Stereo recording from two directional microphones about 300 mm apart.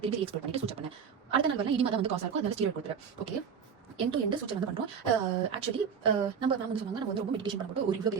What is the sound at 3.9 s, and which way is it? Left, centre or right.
Speech, centre.